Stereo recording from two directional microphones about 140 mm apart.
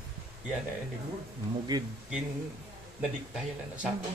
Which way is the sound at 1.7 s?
25° right (ahead or behind).